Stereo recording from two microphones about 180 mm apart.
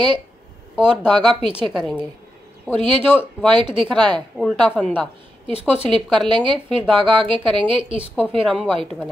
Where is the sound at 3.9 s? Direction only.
25° right (ahead or behind).